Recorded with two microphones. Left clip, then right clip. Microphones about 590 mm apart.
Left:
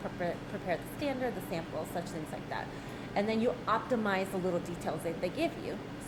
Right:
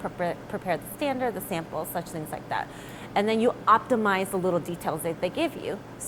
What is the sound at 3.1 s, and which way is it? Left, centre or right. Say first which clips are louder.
A woman's voice: right 8 dB; right.